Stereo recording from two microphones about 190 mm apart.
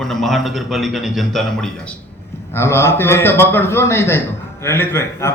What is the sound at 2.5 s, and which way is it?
A man's voice, 15° left (ahead or behind).